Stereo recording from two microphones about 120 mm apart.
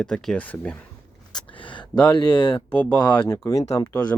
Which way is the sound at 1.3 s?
45° left (ahead or behind).